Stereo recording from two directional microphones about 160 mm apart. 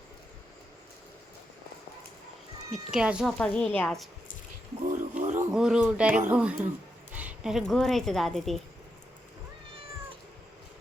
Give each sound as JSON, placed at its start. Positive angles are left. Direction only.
{"t": 2.9, "sound": "a woman's voice", "side_deg": -5}
{"t": 3.3, "sound": "a woman's voice", "side_deg": 10}
{"t": 4.9, "sound": "a sound", "side_deg": -50}
{"t": 5.5, "sound": "a woman's voice", "side_deg": -5}